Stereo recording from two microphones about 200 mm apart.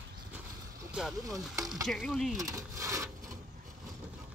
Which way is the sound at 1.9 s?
Centre (ahead or behind).